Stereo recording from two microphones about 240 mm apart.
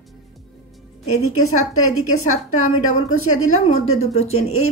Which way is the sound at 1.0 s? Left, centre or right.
Left.